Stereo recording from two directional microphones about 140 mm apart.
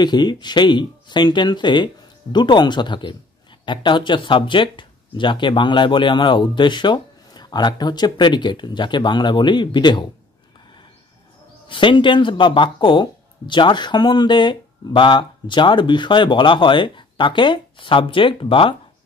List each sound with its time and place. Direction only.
0.0 s speech: 30° left (ahead or behind)
11.7 s speech: 35° left (ahead or behind)